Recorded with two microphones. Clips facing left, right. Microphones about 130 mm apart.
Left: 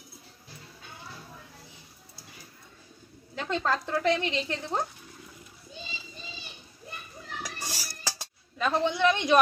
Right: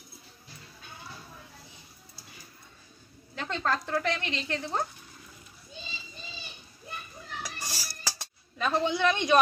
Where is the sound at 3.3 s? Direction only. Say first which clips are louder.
Left 2 dB; 15° left (ahead or behind).